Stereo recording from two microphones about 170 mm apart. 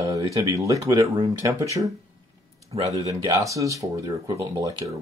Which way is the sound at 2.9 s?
20° right (ahead or behind).